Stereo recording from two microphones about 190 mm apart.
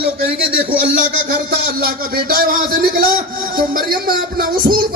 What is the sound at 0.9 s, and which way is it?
Music, 50° right (ahead or behind).